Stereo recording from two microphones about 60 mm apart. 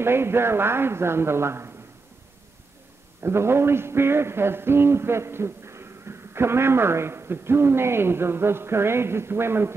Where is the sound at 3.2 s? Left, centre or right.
Right.